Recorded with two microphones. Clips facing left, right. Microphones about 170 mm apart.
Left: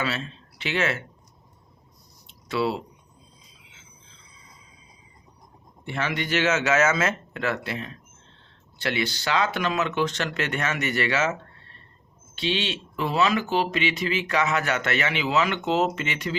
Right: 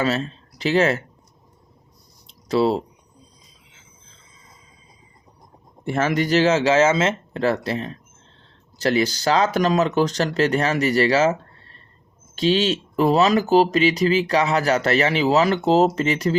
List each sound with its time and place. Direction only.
0.0 s speech: 40° right (ahead or behind)
2.2 s a sound: 35° right (ahead or behind)
5.8 s speech: 45° right (ahead or behind)